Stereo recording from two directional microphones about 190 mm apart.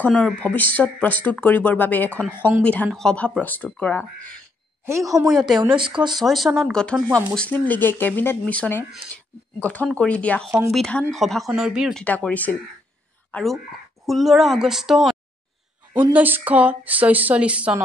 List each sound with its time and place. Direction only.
0.0 s speech: 5° left (ahead or behind)
4.8 s speech: 15° right (ahead or behind)
5.3 s speech: centre (ahead or behind)
7.1 s speech: 15° right (ahead or behind)
7.3 s speech: 5° left (ahead or behind)